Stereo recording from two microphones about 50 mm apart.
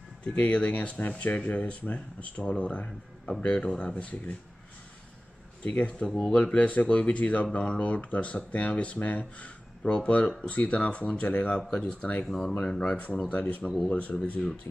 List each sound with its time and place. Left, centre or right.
0.2 s speech: left
5.6 s speech: left
11.7 s speech: centre
12.0 s speech: left
12.3 s speech: centre
12.6 s speech: centre
13.3 s speech: left